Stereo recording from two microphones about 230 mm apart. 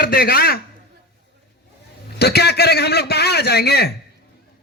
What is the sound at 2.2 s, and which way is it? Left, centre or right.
A man's voice, left.